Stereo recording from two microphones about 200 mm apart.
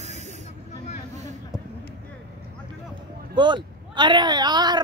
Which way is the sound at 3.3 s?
25° right (ahead or behind).